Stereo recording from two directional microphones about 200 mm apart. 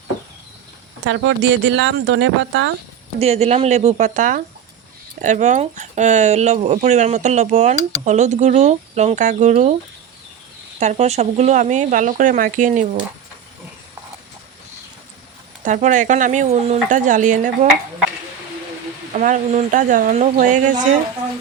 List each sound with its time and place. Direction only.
1.0 s speech: 65° right (ahead or behind)
3.2 s speech: 30° right (ahead or behind)
10.8 s speech: 35° right (ahead or behind)
15.6 s speech: 40° right (ahead or behind)
19.1 s speech: 40° right (ahead or behind)